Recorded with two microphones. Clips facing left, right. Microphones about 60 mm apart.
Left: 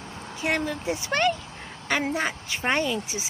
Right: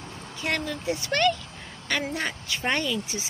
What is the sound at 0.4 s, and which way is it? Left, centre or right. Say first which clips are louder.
A woman's voice: left 2 dB; centre.